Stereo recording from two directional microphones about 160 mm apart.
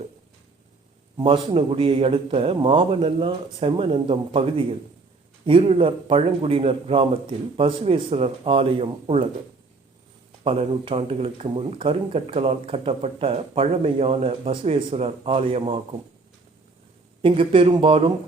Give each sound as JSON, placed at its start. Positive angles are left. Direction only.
{"t": 1.2, "sound": "speech", "side_deg": -35}
{"t": 10.4, "sound": "speech", "side_deg": -35}
{"t": 17.2, "sound": "speech", "side_deg": -30}